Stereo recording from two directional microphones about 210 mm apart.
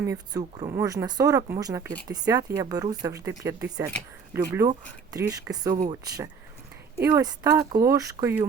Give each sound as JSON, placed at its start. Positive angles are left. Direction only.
{"t": 0.0, "sound": "speech", "side_deg": -15}